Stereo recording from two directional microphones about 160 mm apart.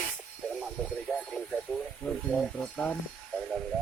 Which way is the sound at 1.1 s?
20° left (ahead or behind).